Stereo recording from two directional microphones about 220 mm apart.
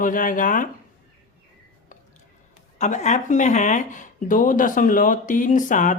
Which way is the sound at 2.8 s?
35° left (ahead or behind).